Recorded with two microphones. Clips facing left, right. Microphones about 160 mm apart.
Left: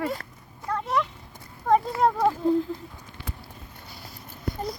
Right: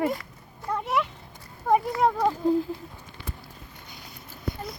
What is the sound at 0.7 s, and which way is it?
Cat, 10° right (ahead or behind).